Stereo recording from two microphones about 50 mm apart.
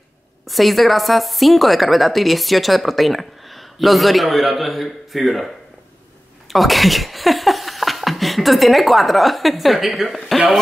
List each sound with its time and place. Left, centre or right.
0.5 s a woman's voice: centre
6.5 s speech: centre